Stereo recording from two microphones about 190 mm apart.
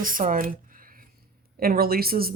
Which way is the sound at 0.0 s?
45° right (ahead or behind).